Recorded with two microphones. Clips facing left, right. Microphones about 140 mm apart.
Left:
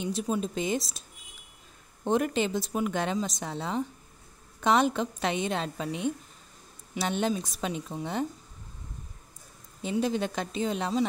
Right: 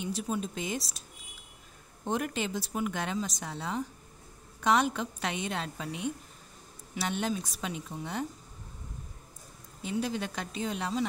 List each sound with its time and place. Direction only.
0.0 s a woman's voice: 25° left (ahead or behind)
2.0 s a woman's voice: 30° left (ahead or behind)
9.8 s a woman's voice: 25° left (ahead or behind)